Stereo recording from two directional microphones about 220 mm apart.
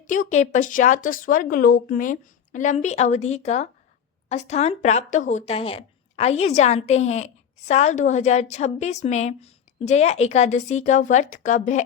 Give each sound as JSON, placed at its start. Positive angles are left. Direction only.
{"t": 0.1, "sound": "speech", "side_deg": 35}